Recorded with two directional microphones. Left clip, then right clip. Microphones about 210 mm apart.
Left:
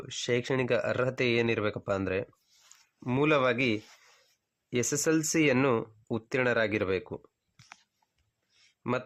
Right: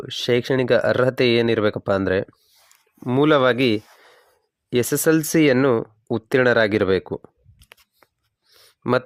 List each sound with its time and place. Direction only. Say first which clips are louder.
0.0 s speech: right 10 dB; 35° right (ahead or behind)